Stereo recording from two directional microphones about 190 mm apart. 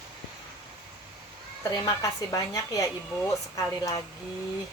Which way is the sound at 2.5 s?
15° left (ahead or behind).